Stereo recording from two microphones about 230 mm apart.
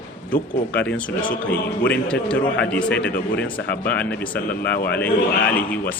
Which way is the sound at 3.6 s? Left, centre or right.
Left.